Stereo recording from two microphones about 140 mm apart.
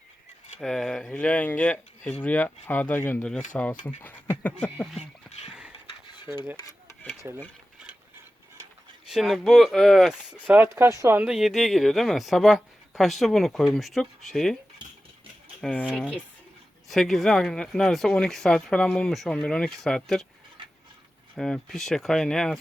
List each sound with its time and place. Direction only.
0.6 s speech: 5° left (ahead or behind)
5.5 s a sound: 5° right (ahead or behind)
6.2 s speech: 10° right (ahead or behind)
9.0 s speech: centre (ahead or behind)
15.6 s speech: 10° left (ahead or behind)
20.6 s a sound: 40° right (ahead or behind)
21.3 s speech: 5° left (ahead or behind)